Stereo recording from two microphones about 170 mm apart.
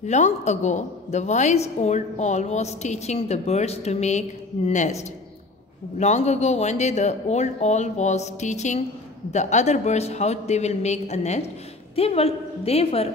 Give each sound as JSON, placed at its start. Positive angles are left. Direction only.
{"t": 0.0, "sound": "a woman's voice", "side_deg": 45}
{"t": 5.9, "sound": "a woman's voice", "side_deg": 40}